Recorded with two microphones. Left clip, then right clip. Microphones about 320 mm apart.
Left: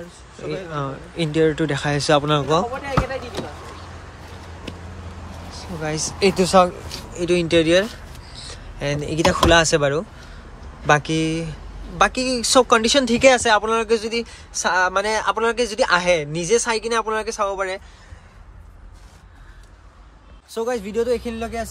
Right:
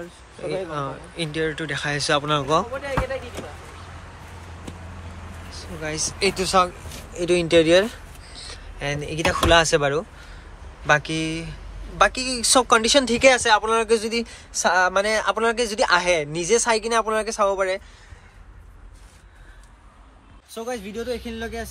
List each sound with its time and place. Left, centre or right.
0.7 s speech: centre
2.7 s speech: left
5.5 s speech: centre
20.5 s speech: centre